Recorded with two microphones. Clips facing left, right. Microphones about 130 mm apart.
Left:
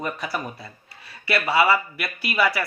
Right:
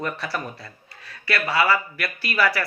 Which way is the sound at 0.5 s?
25° left (ahead or behind).